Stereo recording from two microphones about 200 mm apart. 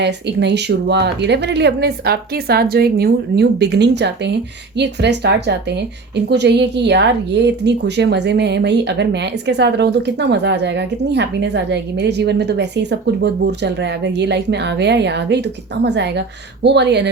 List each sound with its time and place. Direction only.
0.0 s speech: 60° right (ahead or behind)